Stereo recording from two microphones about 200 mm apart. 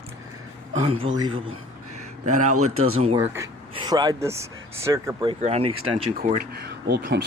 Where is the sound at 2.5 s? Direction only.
90° right.